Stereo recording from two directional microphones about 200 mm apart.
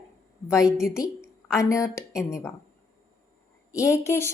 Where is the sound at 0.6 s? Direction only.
Centre (ahead or behind).